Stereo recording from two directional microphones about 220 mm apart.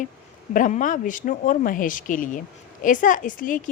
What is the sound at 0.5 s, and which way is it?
A woman's voice, 35° left (ahead or behind).